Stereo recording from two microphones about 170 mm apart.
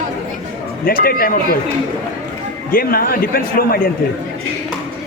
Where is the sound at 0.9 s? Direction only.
60° left (ahead or behind).